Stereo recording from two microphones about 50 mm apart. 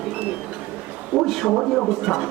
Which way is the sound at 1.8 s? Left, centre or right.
Centre.